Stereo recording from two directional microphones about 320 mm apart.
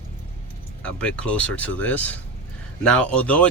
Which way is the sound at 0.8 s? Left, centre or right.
Centre.